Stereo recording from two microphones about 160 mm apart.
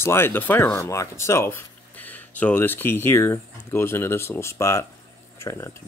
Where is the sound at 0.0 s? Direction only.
15° left (ahead or behind).